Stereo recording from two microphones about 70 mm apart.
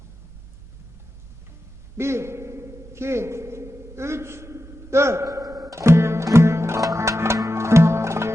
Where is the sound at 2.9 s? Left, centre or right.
Right.